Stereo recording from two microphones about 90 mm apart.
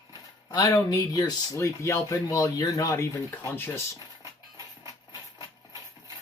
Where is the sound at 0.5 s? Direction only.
40° left (ahead or behind).